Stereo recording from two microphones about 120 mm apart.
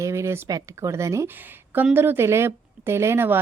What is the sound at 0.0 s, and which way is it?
A woman's voice, 25° right (ahead or behind).